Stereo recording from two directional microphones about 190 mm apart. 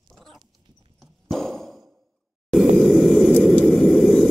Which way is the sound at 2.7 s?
Centre (ahead or behind).